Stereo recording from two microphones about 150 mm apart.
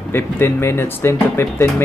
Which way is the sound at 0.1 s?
15° left (ahead or behind).